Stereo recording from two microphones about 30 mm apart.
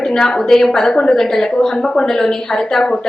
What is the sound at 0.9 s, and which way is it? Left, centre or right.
Speech, left.